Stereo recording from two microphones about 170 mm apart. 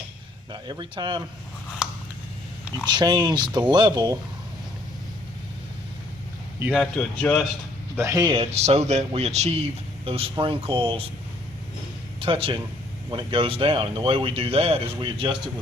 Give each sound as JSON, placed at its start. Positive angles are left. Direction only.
{"t": 0.5, "sound": "speech", "side_deg": -25}
{"t": 2.9, "sound": "speech", "side_deg": -25}
{"t": 6.7, "sound": "speech", "side_deg": 5}
{"t": 7.9, "sound": "speech", "side_deg": -20}
{"t": 12.2, "sound": "speech", "side_deg": -30}